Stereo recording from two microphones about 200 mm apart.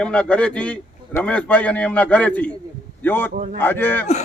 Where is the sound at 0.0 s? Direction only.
5° left (ahead or behind).